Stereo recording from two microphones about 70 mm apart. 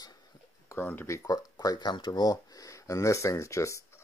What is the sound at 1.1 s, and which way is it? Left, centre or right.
Speech, left.